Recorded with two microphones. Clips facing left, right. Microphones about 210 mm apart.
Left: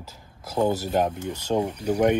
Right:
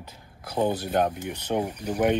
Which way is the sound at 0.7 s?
25° left (ahead or behind).